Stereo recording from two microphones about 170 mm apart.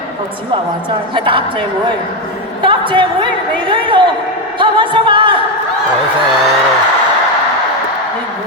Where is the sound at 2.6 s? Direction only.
30° right (ahead or behind).